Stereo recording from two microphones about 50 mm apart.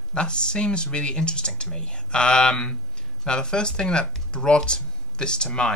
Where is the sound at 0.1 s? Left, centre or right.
Centre.